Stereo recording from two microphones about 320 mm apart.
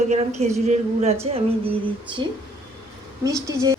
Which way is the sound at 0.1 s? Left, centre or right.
Right.